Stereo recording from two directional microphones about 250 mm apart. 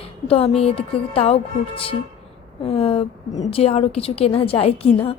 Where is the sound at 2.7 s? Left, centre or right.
Left.